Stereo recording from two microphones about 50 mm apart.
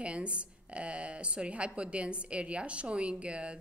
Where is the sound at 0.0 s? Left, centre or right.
Right.